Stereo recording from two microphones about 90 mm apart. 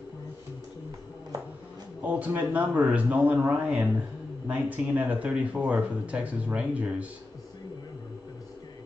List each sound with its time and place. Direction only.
2.0 s a man's voice: 20° right (ahead or behind)